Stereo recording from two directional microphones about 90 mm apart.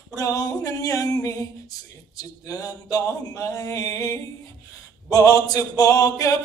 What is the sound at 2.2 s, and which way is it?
Speech, 40° left (ahead or behind).